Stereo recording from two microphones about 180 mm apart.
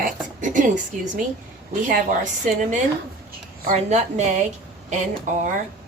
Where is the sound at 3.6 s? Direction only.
40° right (ahead or behind).